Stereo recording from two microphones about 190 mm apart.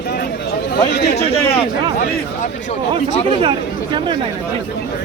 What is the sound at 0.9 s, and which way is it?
Speech, 60° left (ahead or behind).